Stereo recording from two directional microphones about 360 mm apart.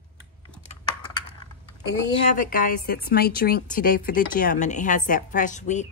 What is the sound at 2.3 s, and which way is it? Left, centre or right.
A woman's voice, left.